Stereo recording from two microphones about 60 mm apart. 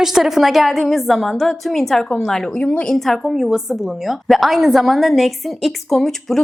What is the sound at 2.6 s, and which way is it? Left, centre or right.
Speech, centre.